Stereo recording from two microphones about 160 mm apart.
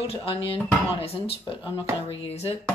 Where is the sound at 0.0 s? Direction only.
40° left (ahead or behind).